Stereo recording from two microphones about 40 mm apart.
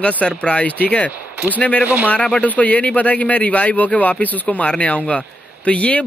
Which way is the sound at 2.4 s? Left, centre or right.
Left.